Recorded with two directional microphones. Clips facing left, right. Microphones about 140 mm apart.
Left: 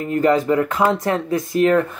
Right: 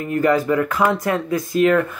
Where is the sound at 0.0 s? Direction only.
30° left (ahead or behind).